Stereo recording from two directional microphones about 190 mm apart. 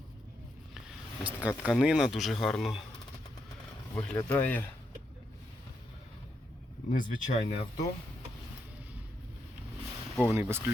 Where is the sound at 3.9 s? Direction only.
10° left (ahead or behind).